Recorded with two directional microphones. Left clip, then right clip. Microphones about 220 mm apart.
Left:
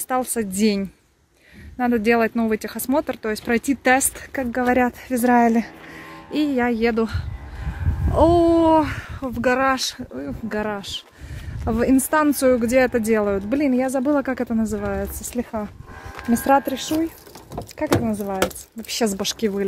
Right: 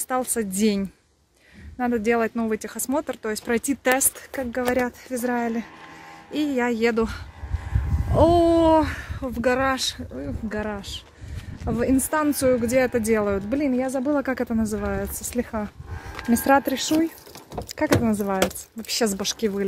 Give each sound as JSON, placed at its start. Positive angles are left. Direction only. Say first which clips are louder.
{"t": 0.1, "sound": "speech", "louder": "left 2 dB", "side_deg": 0}
{"t": 4.6, "sound": "speech", "louder": "left 4 dB", "side_deg": 15}
{"t": 6.3, "sound": "speech", "louder": "left 3 dB", "side_deg": 5}
{"t": 13.0, "sound": "speech", "louder": "left 2 dB", "side_deg": 0}
{"t": 13.5, "sound": "speech", "louder": "left 3 dB", "side_deg": 15}
{"t": 14.2, "sound": "speech", "louder": "left 1 dB", "side_deg": 0}
{"t": 16.6, "sound": "speech", "louder": "right 1 dB", "side_deg": -15}
{"t": 18.4, "sound": "speech", "louder": "left 1 dB", "side_deg": 0}